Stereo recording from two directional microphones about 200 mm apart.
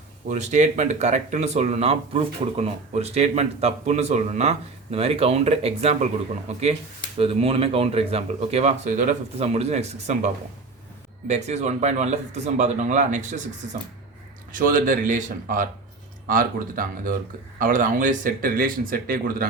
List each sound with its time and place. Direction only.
0.3 s speech: 35° right (ahead or behind)
14.5 s speech: 45° right (ahead or behind)